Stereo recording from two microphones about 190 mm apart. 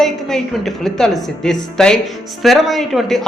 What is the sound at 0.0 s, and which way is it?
Speech, centre (ahead or behind).